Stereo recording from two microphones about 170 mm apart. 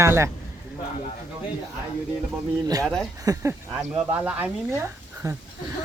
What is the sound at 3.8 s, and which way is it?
Speech, 10° right (ahead or behind).